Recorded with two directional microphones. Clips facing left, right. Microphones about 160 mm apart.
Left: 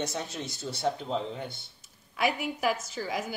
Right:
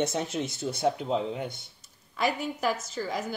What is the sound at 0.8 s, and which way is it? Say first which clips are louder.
Speech: right 3 dB; 10° right (ahead or behind).